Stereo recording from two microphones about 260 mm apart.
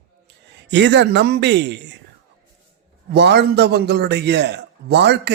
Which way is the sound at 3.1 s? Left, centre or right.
Right.